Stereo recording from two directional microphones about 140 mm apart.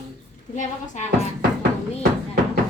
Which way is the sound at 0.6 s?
60° left (ahead or behind).